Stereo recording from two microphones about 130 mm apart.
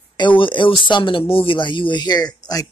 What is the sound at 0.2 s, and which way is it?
Speech, 40° left (ahead or behind).